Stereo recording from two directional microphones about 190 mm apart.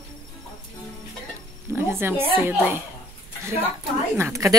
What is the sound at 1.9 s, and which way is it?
Speech, 10° right (ahead or behind).